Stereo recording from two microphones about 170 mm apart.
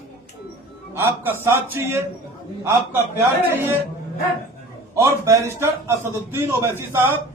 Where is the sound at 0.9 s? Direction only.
15° right (ahead or behind).